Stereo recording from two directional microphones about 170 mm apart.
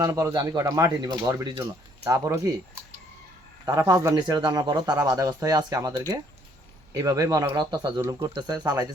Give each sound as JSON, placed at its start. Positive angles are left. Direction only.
{"t": 0.0, "sound": "speech", "side_deg": -20}
{"t": 3.7, "sound": "speech", "side_deg": -20}